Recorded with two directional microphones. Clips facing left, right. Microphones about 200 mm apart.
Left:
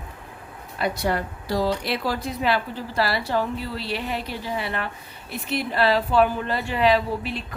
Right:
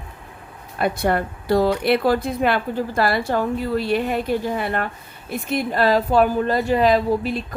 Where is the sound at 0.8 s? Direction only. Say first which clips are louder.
Right 4 dB; 55° right (ahead or behind).